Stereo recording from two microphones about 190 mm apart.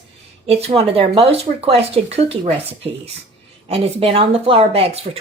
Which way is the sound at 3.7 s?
30° right (ahead or behind).